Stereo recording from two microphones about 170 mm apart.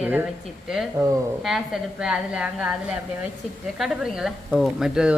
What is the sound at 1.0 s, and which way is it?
Speech, 20° right (ahead or behind).